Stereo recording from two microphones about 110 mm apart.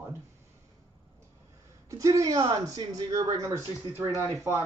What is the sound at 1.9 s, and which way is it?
Speech, 30° right (ahead or behind).